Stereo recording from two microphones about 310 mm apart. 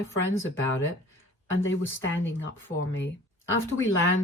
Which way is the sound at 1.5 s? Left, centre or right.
Left.